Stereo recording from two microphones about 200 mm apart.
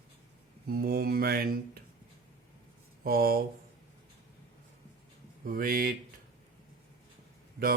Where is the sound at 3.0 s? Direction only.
45° right (ahead or behind).